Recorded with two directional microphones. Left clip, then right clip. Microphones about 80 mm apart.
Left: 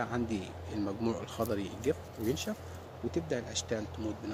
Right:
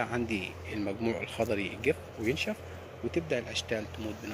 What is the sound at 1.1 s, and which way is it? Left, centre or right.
Speech, centre.